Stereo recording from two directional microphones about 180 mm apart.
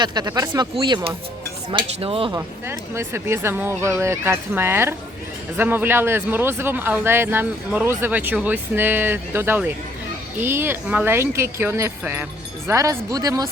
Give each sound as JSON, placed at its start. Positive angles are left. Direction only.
{"t": 0.0, "sound": "speech", "side_deg": -25}
{"t": 1.7, "sound": "cutlery", "side_deg": -30}
{"t": 2.3, "sound": "speech", "side_deg": -15}